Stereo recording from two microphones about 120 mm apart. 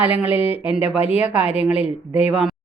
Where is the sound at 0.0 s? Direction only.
10° right (ahead or behind).